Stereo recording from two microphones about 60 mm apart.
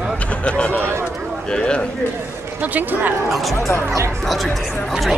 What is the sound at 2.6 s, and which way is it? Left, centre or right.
Speech, right.